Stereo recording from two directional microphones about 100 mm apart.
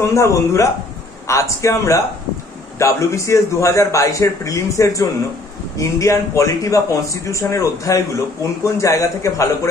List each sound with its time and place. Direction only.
0.0 s a man's voice: 30° left (ahead or behind)